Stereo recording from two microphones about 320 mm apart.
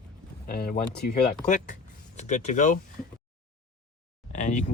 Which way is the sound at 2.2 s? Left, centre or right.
Left.